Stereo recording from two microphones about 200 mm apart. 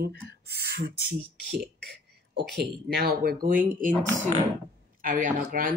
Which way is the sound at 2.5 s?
50° right (ahead or behind).